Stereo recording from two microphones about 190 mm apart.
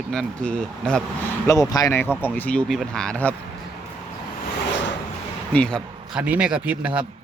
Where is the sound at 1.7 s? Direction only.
15° left (ahead or behind).